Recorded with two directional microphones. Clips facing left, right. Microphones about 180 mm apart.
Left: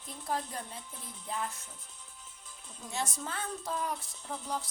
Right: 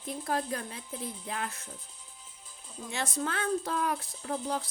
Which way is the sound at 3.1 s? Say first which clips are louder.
Right 8 dB; 85° right.